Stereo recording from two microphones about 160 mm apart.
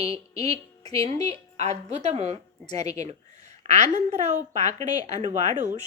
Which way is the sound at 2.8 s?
20° left (ahead or behind).